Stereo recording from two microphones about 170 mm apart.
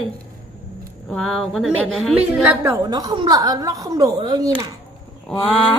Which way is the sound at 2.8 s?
25° right (ahead or behind).